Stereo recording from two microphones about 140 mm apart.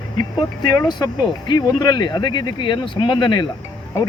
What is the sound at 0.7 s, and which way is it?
Speech, 30° left (ahead or behind).